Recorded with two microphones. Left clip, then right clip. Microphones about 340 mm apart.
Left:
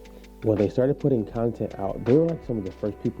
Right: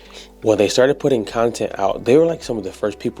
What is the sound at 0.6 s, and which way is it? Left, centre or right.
Speech, centre.